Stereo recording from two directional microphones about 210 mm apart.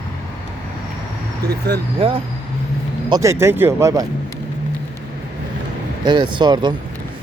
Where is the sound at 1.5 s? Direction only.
50° right (ahead or behind).